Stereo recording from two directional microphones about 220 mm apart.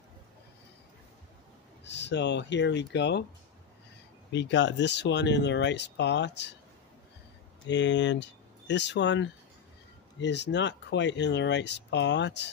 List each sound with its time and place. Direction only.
1.9 s speech: 50° left (ahead or behind)
4.3 s speech: 50° left (ahead or behind)
7.6 s speech: 55° left (ahead or behind)